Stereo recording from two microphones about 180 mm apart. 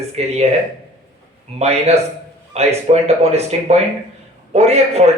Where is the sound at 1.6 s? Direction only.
35° right (ahead or behind).